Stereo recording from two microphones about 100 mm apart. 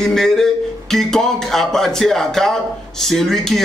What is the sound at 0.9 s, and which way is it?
Music, 5° left (ahead or behind).